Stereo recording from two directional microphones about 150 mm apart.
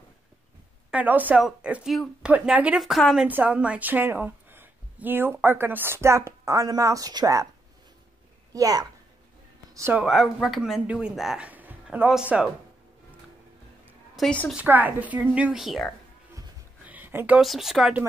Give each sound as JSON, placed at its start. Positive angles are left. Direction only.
{"t": 0.9, "sound": "a woman's voice", "side_deg": -10}
{"t": 3.3, "sound": "a woman's voice", "side_deg": -10}
{"t": 8.5, "sound": "a woman's voice", "side_deg": -25}
{"t": 10.0, "sound": "speech", "side_deg": 0}
{"t": 14.1, "sound": "a woman's voice", "side_deg": 5}
{"t": 14.5, "sound": "a woman's voice", "side_deg": -10}
{"t": 16.8, "sound": "a sound", "side_deg": -10}
{"t": 17.4, "sound": "speech", "side_deg": 0}